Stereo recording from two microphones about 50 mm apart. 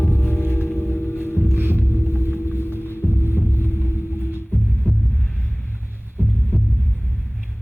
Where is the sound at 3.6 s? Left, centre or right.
Right.